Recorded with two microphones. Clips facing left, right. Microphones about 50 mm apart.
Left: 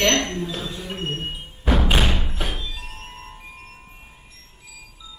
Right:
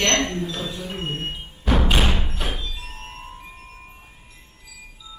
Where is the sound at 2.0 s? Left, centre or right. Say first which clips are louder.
Even; centre.